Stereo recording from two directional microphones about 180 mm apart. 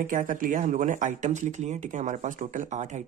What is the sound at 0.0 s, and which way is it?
Speech, 45° right (ahead or behind).